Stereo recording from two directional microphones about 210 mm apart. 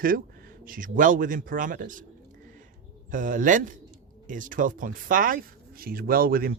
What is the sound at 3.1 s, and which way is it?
A man's voice, 40° right (ahead or behind).